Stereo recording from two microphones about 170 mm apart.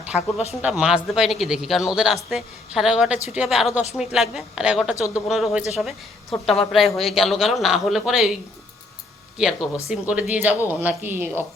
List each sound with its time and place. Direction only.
0.2 s speech: 40° left (ahead or behind)
0.5 s speech: 5° right (ahead or behind)
4.9 s speech: 20° left (ahead or behind)
5.3 s speech: centre (ahead or behind)
9.6 s speech: 15° left (ahead or behind)
9.9 s speech: 10° right (ahead or behind)